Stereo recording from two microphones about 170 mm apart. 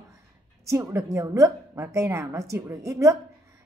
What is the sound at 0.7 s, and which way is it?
A woman's voice, 20° right (ahead or behind).